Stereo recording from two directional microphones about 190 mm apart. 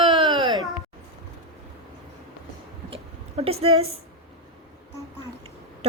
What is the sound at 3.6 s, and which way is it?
Speech, 30° right (ahead or behind).